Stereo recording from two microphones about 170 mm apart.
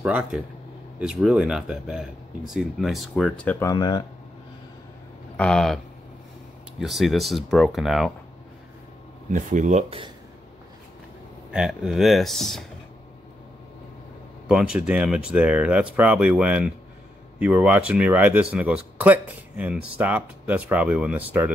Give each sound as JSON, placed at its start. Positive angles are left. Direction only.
{"t": 0.0, "sound": "speech", "side_deg": -5}
{"t": 3.5, "sound": "speech", "side_deg": 20}
{"t": 5.4, "sound": "speech", "side_deg": 5}
{"t": 6.8, "sound": "speech", "side_deg": 0}
{"t": 9.3, "sound": "speech", "side_deg": -45}
{"t": 11.5, "sound": "speech", "side_deg": -5}
{"t": 14.5, "sound": "speech", "side_deg": -5}